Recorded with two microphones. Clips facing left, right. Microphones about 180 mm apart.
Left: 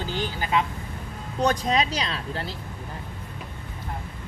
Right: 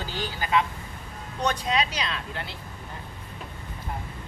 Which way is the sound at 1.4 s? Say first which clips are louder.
Left 3 dB; 40° left (ahead or behind).